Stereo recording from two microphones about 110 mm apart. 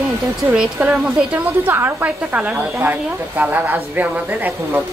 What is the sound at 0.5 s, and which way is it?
A woman's voice, 10° right (ahead or behind).